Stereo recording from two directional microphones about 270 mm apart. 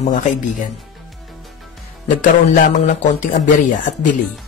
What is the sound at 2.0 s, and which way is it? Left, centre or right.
A man's voice, left.